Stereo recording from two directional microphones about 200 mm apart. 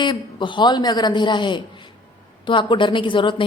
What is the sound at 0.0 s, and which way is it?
A woman's voice, 25° left (ahead or behind).